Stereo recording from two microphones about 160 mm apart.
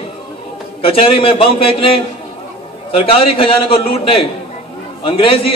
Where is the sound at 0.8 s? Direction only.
35° left (ahead or behind).